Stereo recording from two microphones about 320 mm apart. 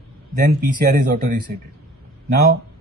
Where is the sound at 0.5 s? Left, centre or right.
Right.